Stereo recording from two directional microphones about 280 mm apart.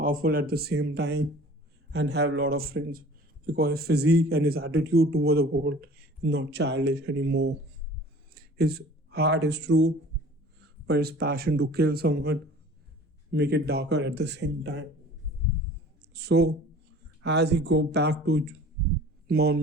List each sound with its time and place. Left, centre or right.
0.0 s a man's voice: right
16.0 s a sound: right
17.2 s a man's voice: right